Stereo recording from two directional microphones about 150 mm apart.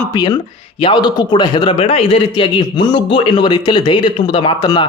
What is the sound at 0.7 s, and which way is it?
A man's voice, 30° left (ahead or behind).